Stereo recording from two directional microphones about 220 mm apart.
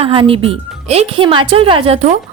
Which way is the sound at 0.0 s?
25° right (ahead or behind).